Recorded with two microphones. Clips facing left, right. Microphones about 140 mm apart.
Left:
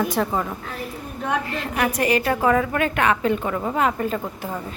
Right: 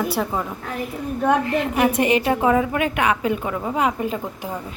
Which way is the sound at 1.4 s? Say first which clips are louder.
Right 5 dB; 20° right (ahead or behind).